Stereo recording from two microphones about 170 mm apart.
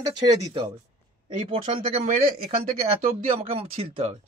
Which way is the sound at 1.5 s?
30° right (ahead or behind).